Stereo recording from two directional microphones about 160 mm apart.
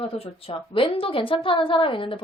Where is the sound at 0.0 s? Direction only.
35° left (ahead or behind).